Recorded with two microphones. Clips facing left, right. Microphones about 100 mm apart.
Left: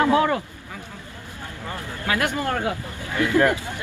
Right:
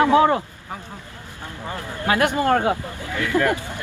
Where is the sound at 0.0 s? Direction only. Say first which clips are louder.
Right 3 dB; 25° right (ahead or behind).